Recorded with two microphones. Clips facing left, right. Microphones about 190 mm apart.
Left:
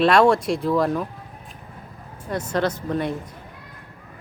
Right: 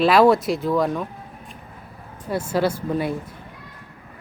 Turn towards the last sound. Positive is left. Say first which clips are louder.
# right 1 dB
turn(degrees=-5)  # may be behind; listen again after turning